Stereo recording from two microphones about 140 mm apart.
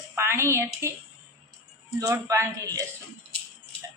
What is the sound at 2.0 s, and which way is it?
Speech, 20° right (ahead or behind).